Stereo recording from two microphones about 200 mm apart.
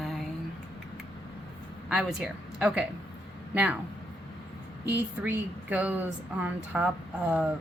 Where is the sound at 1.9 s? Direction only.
5° right (ahead or behind).